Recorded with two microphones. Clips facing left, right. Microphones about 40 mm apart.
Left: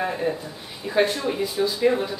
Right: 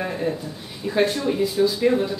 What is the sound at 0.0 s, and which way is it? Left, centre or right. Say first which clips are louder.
Speech: even; centre.